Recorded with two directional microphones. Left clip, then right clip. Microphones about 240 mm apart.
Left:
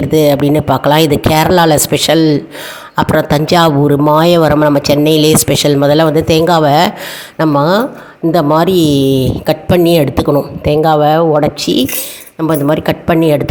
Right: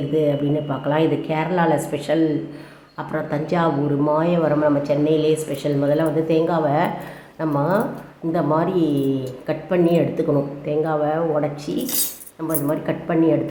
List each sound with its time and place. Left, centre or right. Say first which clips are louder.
0.1 s a man's voice: left 11 dB; left